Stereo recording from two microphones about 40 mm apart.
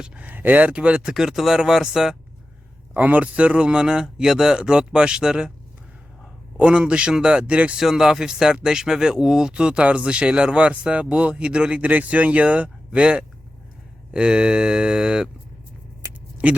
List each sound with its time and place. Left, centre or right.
0.3 s speech: right
0.8 s speech: right
1.1 s speech: centre
2.9 s speech: right
6.6 s speech: right
7.8 s speech: centre
11.9 s speech: right